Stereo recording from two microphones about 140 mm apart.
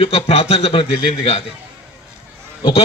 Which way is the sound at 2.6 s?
45° left (ahead or behind).